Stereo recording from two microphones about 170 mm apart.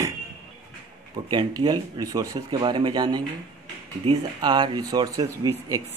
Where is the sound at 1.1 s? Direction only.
25° right (ahead or behind).